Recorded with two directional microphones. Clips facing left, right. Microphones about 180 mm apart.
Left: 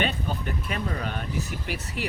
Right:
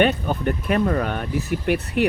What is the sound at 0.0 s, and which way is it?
Speech, 60° right (ahead or behind).